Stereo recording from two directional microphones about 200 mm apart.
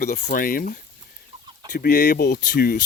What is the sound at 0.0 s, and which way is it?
Speech, 45° left (ahead or behind).